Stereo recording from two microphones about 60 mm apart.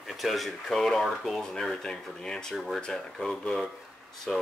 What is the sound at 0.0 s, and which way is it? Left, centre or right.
Speech, centre.